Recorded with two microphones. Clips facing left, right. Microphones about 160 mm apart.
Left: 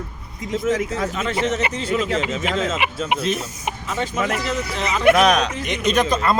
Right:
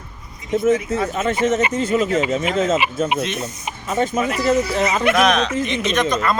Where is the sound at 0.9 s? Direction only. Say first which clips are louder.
Right 3 dB; 45° right (ahead or behind).